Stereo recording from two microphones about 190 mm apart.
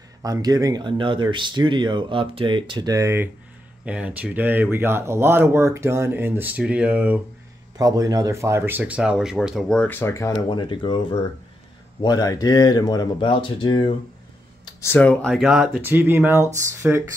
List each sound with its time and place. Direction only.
0.2 s speech: 20° right (ahead or behind)
7.7 s speech: 20° right (ahead or behind); by 10.3 s 15° left (ahead or behind)
10.5 s speech: 25° left (ahead or behind); by 17.0 s 10° right (ahead or behind)